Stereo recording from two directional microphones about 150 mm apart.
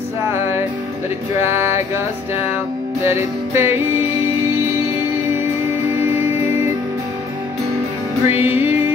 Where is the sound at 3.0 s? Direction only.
15° right (ahead or behind).